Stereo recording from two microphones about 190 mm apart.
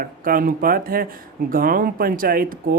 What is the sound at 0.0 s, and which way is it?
Speech, 50° right (ahead or behind).